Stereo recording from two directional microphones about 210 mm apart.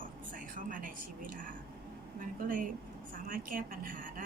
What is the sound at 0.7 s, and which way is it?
A woman's voice, 40° right (ahead or behind).